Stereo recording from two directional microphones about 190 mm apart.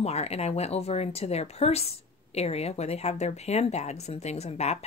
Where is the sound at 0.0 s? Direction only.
35° left (ahead or behind).